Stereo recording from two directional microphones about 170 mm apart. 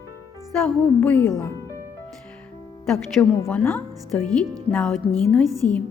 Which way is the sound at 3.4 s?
15° left (ahead or behind).